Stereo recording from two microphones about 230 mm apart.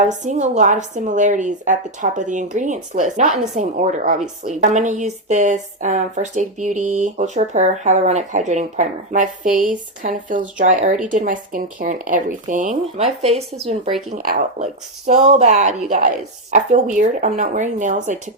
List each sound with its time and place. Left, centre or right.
0.0 s a woman's voice: right